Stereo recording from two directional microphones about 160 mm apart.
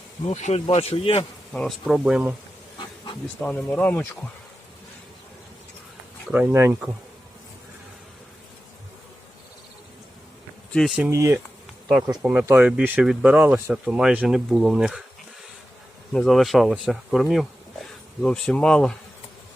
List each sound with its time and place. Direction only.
0.3 s a man's voice: 45° left (ahead or behind)
1.5 s speech: 5° left (ahead or behind)
2.7 s hiss: 30° left (ahead or behind)
3.4 s speech: 10° left (ahead or behind)
6.3 s speech: 15° right (ahead or behind)
10.7 s speech: 5° left (ahead or behind)
10.9 s speech: 15° right (ahead or behind)
16.1 s speech: centre (ahead or behind)